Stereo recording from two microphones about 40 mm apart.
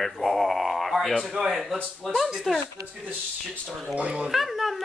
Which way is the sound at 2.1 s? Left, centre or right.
Centre.